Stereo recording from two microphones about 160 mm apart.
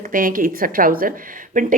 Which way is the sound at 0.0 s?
60° right (ahead or behind).